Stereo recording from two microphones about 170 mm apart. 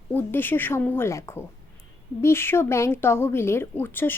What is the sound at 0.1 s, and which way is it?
A woman's voice, 10° left (ahead or behind).